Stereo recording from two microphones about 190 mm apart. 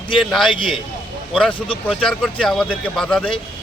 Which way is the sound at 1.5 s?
25° left (ahead or behind).